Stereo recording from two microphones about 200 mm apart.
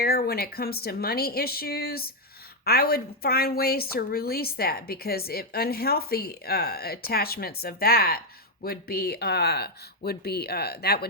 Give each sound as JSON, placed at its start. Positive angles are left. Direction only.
{"t": 0.0, "sound": "a woman's voice", "side_deg": 50}